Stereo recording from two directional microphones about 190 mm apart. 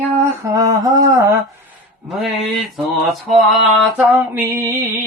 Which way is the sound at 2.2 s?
Centre (ahead or behind).